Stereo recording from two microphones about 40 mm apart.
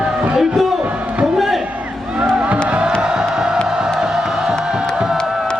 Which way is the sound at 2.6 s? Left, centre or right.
Right.